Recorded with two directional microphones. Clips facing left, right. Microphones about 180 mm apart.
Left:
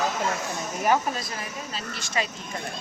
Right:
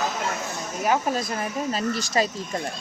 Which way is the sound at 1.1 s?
50° right (ahead or behind).